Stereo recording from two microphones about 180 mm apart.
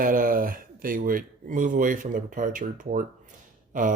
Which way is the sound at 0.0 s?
50° right (ahead or behind).